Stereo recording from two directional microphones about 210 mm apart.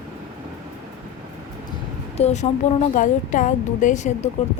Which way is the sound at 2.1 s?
30° left (ahead or behind).